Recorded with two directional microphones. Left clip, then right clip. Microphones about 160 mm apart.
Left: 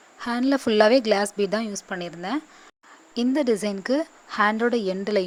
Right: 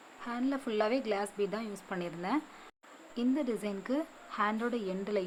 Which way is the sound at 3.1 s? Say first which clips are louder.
Left 11 dB; 55° left (ahead or behind).